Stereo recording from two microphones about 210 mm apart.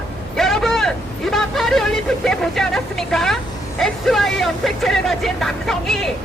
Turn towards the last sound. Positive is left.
turn(degrees=0)  # may be behind; listen again after turning